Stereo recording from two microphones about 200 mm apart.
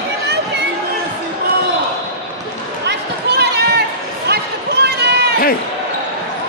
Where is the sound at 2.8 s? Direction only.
55° right (ahead or behind).